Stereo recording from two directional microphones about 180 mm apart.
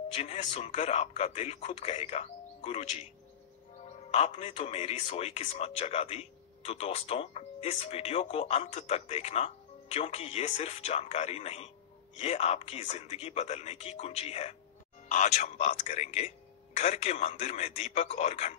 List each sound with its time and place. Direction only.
0.1 s a man's voice: 40° left (ahead or behind)
4.1 s a man's voice: 40° left (ahead or behind)